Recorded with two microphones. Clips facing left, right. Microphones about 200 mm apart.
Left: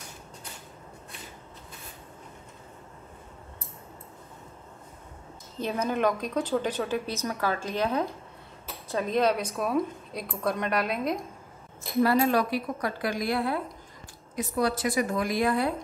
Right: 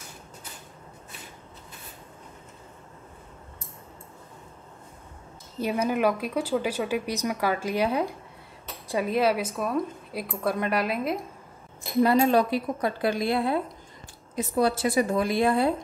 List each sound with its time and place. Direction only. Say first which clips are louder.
5.6 s a woman's voice: right 2 dB; 10° right (ahead or behind)
12.0 s speech: right 3 dB; 20° right (ahead or behind)